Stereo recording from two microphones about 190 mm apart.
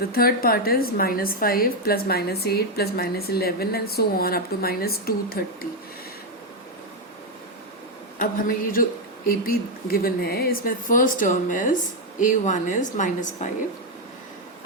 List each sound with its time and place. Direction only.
0.1 s a woman's voice: 50° left (ahead or behind)
8.2 s a woman's voice: 45° left (ahead or behind)